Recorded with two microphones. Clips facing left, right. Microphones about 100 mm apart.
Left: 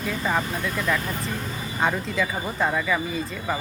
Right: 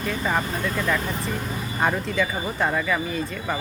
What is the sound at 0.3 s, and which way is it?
Speech, centre (ahead or behind).